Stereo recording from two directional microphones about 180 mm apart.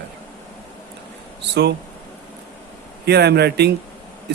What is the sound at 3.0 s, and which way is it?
Speech, 65° right (ahead or behind).